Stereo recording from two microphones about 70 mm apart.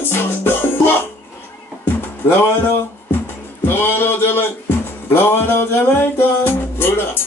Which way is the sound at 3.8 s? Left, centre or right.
Left.